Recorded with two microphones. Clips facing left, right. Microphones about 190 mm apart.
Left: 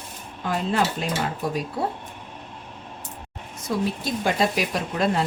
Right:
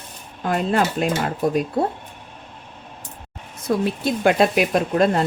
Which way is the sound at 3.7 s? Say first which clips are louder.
Right 5 dB; 55° right (ahead or behind).